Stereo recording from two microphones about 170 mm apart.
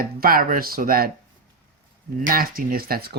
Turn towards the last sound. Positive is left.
turn(degrees=-65)  # may be behind; listen again after turning